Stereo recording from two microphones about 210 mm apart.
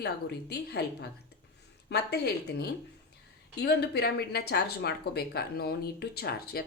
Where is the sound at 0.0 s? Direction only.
50° left (ahead or behind).